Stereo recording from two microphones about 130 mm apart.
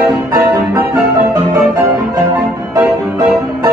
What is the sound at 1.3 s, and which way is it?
Music, 25° right (ahead or behind).